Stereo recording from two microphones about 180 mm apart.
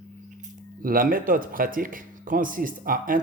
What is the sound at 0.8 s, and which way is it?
Speech, 50° right (ahead or behind).